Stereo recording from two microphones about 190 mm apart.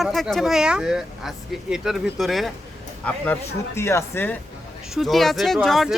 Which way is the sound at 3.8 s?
15° left (ahead or behind).